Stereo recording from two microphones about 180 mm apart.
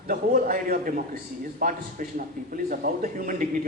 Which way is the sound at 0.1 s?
50° right (ahead or behind).